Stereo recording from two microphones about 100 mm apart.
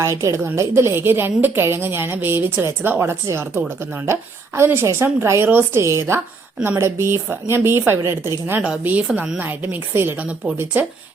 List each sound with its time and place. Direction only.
0.0 s a woman's voice: 30° right (ahead or behind)
8.6 s a woman's voice: 10° right (ahead or behind)